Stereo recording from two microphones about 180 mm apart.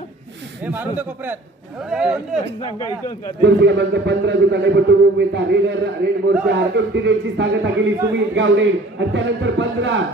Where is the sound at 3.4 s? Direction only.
75° right (ahead or behind).